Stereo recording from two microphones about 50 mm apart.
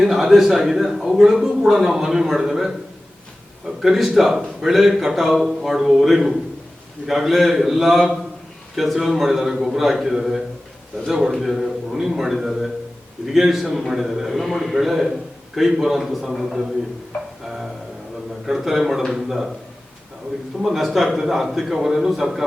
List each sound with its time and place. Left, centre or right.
0.0 s speech: centre
3.8 s a man's voice: centre
17.1 s music: centre
18.4 s a man's voice: centre
20.6 s a man's voice: centre